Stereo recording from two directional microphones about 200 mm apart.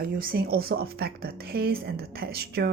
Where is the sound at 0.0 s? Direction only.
45° right (ahead or behind).